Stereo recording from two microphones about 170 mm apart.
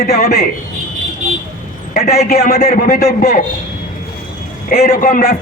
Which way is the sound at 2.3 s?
60° left (ahead or behind).